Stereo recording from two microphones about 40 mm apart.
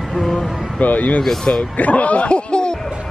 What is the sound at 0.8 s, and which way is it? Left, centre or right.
Speech, left.